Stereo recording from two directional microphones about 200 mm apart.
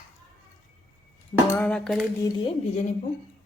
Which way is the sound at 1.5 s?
5° left (ahead or behind).